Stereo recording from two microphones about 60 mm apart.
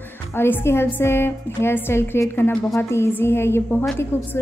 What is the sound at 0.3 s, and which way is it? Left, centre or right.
A woman's voice, left.